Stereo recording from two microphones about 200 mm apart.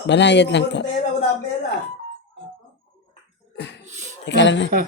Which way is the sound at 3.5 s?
60° left (ahead or behind).